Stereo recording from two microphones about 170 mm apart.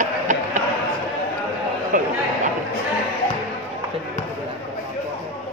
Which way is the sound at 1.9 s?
50° right (ahead or behind).